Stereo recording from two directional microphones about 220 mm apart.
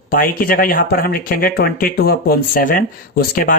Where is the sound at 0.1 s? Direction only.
40° left (ahead or behind).